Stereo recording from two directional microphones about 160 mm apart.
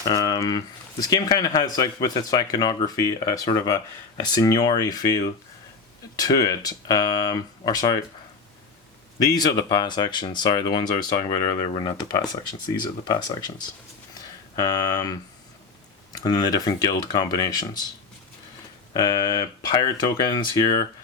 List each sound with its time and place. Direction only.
0.1 s speech: 25° left (ahead or behind)
9.2 s speech: 25° left (ahead or behind)
14.1 s a sound: 25° left (ahead or behind)
16.1 s speech: 25° left (ahead or behind)
18.9 s speech: 25° left (ahead or behind)